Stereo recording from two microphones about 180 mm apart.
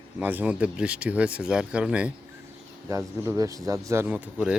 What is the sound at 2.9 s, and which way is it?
Speech, 15° right (ahead or behind).